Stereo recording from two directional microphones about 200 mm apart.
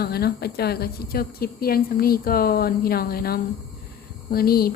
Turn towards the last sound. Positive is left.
turn(degrees=50)  # may be behind; listen again after turning